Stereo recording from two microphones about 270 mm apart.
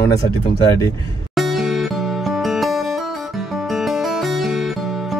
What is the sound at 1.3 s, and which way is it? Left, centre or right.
Music, centre.